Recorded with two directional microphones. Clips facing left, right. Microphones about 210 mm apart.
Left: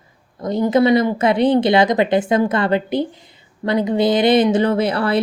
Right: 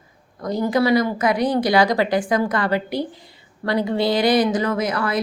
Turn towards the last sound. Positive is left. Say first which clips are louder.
# left 4 dB
turn(degrees=30)  # may be behind; listen again after turning